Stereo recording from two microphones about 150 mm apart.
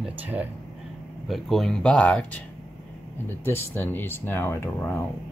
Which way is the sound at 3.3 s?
15° left (ahead or behind).